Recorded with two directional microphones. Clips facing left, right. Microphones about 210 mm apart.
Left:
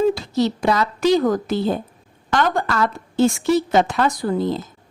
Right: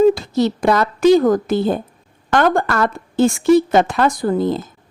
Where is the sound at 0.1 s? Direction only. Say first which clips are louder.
Right 3 dB; 50° right (ahead or behind).